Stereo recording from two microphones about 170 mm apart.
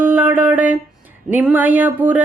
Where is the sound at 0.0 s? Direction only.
10° right (ahead or behind).